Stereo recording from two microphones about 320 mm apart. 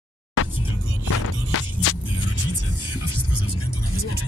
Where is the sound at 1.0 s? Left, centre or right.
Left.